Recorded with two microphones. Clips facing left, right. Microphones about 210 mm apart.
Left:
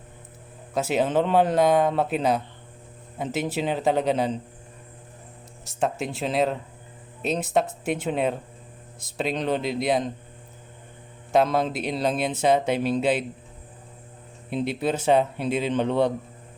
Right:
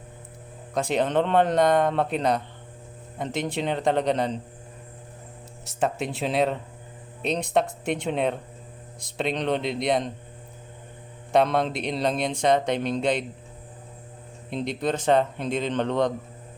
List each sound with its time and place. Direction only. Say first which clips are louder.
0.7 s speech: left 1 dB; 5° left (ahead or behind)
5.6 s speech: even; centre (ahead or behind)
11.3 s speech: even; centre (ahead or behind)
14.5 s a man's voice: left 1 dB; 5° left (ahead or behind)